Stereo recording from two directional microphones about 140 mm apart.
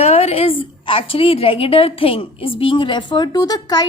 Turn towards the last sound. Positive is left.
turn(degrees=30)  # may be behind; listen again after turning